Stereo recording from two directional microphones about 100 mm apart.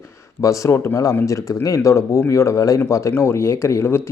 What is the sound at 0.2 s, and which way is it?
Speech, 30° left (ahead or behind).